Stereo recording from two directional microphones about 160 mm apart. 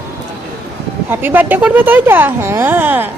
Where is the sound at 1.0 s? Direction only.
10° right (ahead or behind).